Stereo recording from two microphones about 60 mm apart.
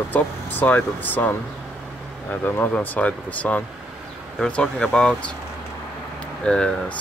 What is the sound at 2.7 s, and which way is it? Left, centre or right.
Speech, left.